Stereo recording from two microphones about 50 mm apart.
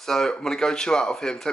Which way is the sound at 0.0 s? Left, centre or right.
Centre.